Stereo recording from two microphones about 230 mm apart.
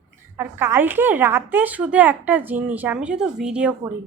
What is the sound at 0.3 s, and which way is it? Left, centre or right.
Speech, centre.